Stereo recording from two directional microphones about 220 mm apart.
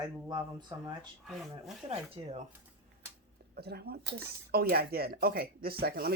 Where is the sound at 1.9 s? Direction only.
30° right (ahead or behind).